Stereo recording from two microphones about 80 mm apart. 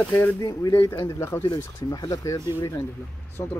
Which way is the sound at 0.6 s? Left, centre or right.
Left.